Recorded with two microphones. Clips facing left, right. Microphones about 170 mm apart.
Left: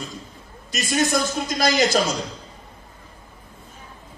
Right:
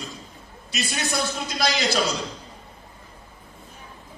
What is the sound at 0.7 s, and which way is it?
A man's voice, 45° left (ahead or behind).